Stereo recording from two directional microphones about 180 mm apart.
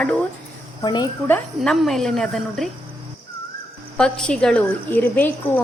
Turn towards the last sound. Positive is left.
turn(degrees=10)  # may be behind; listen again after turning